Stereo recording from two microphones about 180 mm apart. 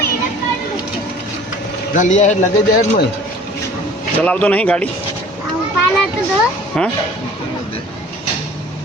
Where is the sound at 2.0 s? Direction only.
40° left (ahead or behind).